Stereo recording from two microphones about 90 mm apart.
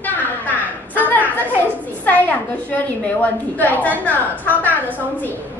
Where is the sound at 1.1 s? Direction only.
20° left (ahead or behind).